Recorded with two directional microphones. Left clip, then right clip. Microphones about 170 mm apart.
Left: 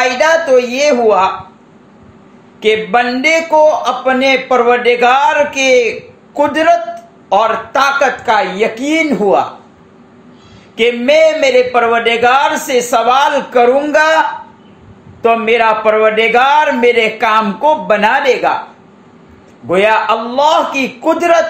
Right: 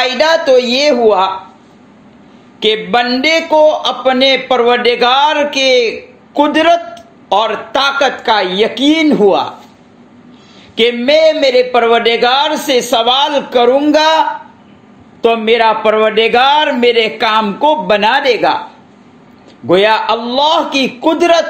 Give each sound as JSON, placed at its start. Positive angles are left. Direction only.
{"t": 0.0, "sound": "speech", "side_deg": -35}
{"t": 2.6, "sound": "a man's voice", "side_deg": -35}
{"t": 10.8, "sound": "a man's voice", "side_deg": -30}
{"t": 15.2, "sound": "a man's voice", "side_deg": -30}
{"t": 19.7, "sound": "a man's voice", "side_deg": -30}